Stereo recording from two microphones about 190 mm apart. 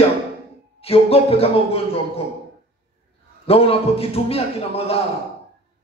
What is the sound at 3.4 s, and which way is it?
Speech, 30° left (ahead or behind).